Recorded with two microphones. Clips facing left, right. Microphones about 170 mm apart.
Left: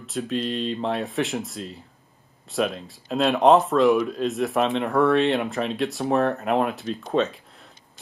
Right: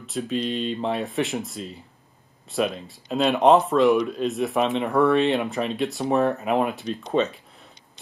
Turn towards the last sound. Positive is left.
turn(degrees=0)  # may be behind; listen again after turning